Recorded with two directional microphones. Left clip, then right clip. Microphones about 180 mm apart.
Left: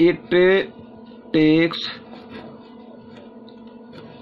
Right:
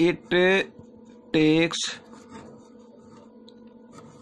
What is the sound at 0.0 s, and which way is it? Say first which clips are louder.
Speech: left 5 dB; 45° right (ahead or behind).